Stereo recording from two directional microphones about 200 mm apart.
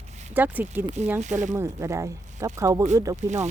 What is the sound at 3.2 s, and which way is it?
Speech, 35° right (ahead or behind).